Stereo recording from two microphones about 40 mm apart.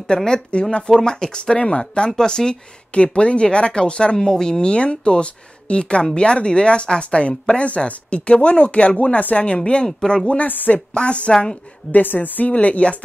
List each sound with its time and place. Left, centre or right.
0.1 s speech: left
2.9 s a woman's voice: left
11.0 s speech: left
11.9 s a woman's voice: left